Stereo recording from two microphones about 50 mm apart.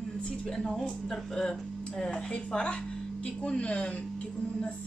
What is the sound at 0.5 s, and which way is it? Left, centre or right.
Speech, centre.